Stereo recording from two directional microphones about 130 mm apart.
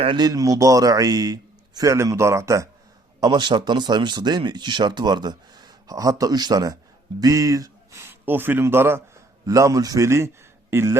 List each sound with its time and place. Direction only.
0.0 s a man's voice: 35° right (ahead or behind)
3.2 s speech: 35° right (ahead or behind)
8.2 s a man's voice: 15° right (ahead or behind)